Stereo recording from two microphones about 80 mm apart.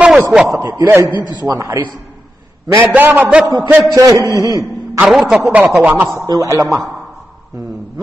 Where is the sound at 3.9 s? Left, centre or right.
Right.